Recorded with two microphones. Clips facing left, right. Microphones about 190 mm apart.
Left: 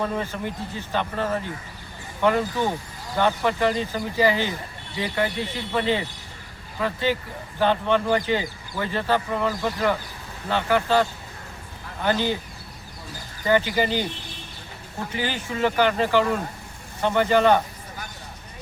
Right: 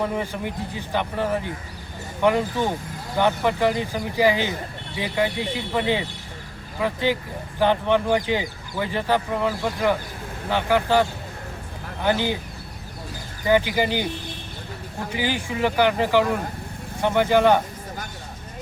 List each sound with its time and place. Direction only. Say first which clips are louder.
0.0 s speech: right 1 dB; 15° right (ahead or behind)
12.0 s speech: right 1 dB; 15° right (ahead or behind)
13.4 s speech: right 1 dB; 15° right (ahead or behind)
15.1 s speech: right 3 dB; 15° right (ahead or behind)